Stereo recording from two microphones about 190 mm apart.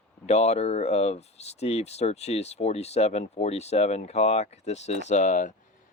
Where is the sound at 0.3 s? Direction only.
35° left (ahead or behind).